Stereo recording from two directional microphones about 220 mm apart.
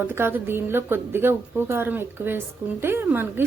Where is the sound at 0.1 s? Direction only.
10° right (ahead or behind).